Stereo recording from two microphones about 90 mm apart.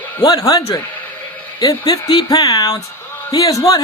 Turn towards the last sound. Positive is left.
turn(degrees=45)  # may be behind; listen again after turning